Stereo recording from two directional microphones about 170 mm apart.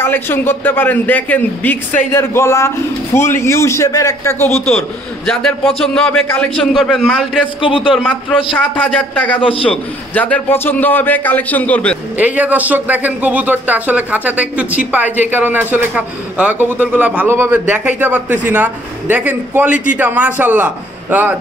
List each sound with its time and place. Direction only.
0.0 s a man's voice: 15° left (ahead or behind)
4.6 s a man's voice: 5° left (ahead or behind)
7.6 s a man's voice: 30° left (ahead or behind)
7.9 s a man's voice: 5° left (ahead or behind)
9.4 s a man's voice: 35° left (ahead or behind)
9.7 s a man's voice: 10° left (ahead or behind)
12.2 s speech: 10° right (ahead or behind)